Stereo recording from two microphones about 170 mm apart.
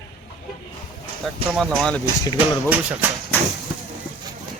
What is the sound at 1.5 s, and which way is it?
Speech, 5° left (ahead or behind).